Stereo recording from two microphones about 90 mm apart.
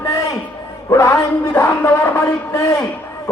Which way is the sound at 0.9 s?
35° left (ahead or behind).